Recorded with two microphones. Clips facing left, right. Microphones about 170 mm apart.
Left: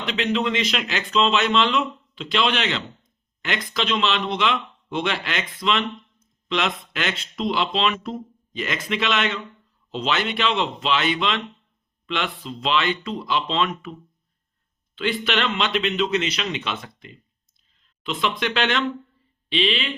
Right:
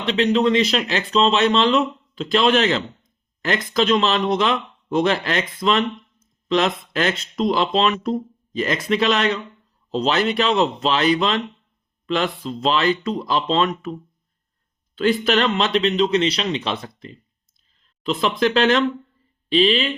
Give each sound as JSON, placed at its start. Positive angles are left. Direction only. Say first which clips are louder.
{"t": 0.0, "sound": "speech", "louder": "right 6 dB", "side_deg": -35}
{"t": 14.9, "sound": "speech", "louder": "right 6 dB", "side_deg": -40}